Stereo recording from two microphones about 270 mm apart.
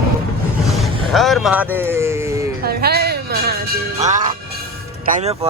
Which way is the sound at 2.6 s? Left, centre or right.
Right.